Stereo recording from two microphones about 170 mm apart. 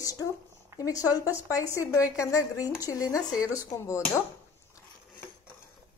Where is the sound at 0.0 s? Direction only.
20° left (ahead or behind).